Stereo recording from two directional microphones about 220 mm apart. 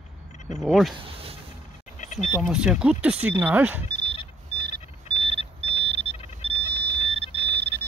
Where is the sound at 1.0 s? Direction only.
25° right (ahead or behind).